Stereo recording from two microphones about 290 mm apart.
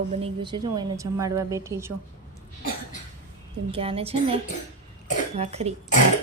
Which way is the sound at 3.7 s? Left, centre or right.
Centre.